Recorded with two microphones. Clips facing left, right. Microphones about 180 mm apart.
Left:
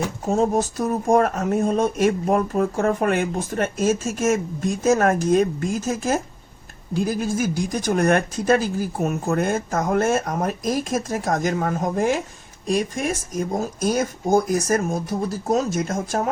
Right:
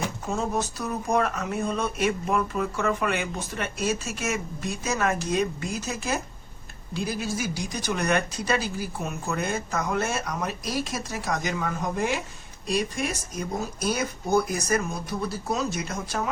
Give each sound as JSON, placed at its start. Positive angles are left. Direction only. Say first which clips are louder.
{"t": 0.3, "sound": "speech", "louder": "left 9 dB", "side_deg": 45}